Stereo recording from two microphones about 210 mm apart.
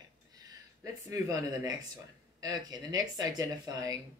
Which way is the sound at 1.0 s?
15° right (ahead or behind).